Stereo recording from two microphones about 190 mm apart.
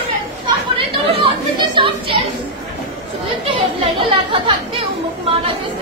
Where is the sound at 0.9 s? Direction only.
30° right (ahead or behind).